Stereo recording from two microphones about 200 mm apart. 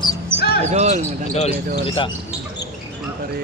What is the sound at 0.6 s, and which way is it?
Basketball bounce, 35° right (ahead or behind).